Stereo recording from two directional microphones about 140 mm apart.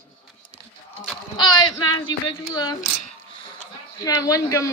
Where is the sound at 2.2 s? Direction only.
30° left (ahead or behind).